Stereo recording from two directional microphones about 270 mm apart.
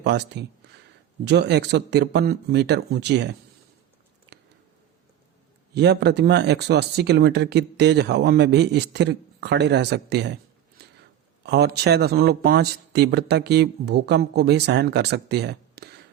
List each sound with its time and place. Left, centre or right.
0.0 s speech: right
5.7 s speech: right
11.4 s speech: right